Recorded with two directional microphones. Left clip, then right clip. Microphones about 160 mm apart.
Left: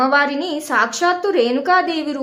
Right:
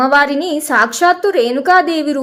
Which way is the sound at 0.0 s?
30° right (ahead or behind).